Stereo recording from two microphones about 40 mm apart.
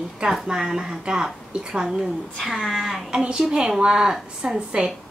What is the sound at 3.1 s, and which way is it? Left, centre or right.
A woman's voice, right.